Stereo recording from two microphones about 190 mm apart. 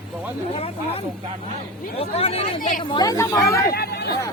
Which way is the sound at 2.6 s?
45° left (ahead or behind).